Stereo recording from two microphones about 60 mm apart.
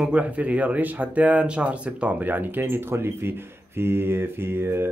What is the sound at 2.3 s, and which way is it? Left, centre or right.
Speech, right.